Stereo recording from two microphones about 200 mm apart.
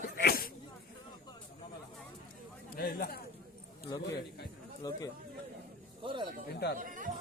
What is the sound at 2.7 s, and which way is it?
Speech, 50° left (ahead or behind).